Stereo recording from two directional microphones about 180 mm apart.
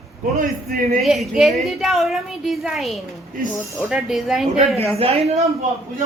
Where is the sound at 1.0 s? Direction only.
Centre (ahead or behind).